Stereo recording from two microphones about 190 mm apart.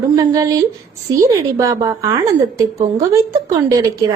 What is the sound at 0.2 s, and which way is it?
A woman's voice, 20° right (ahead or behind).